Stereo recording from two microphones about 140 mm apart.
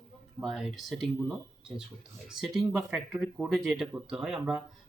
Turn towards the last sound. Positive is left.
turn(degrees=-5)  # may be behind; listen again after turning